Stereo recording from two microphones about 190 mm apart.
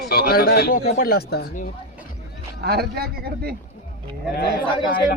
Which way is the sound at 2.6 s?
55° right (ahead or behind).